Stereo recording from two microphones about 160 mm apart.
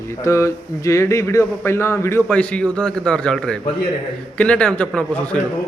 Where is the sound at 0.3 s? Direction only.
20° left (ahead or behind).